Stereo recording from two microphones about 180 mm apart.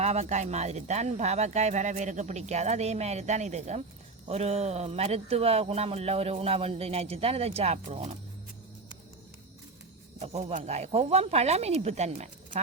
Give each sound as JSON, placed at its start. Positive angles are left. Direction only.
{"t": 0.0, "sound": "speech", "side_deg": -35}
{"t": 10.2, "sound": "speech", "side_deg": -40}